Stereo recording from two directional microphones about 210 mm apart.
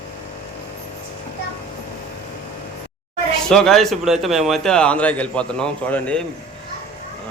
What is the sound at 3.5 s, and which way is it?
A man's voice, centre (ahead or behind).